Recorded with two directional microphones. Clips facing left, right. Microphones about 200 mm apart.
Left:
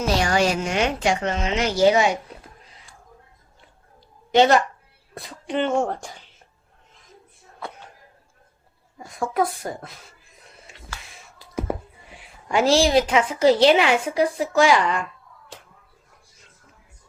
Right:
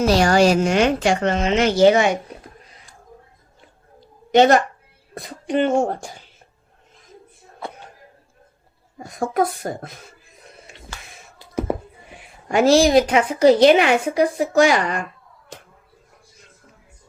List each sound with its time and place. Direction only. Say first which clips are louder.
0.1 s a woman's voice: right 5 dB; 35° right (ahead or behind)
1.2 s speech: right 5 dB; 60° right (ahead or behind)
4.3 s speech: right 3 dB; 50° right (ahead or behind)
9.0 s a woman's voice: right 3 dB; 40° right (ahead or behind)
11.3 s a sound: right 4 dB; 25° right (ahead or behind)
12.1 s a sound: right 3 dB; 50° right (ahead or behind)
13.3 s a woman's voice: right 4 dB; 15° right (ahead or behind)
13.6 s speech: right 3 dB; 50° right (ahead or behind)